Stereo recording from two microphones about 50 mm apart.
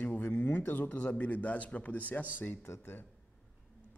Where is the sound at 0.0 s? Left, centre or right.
Left.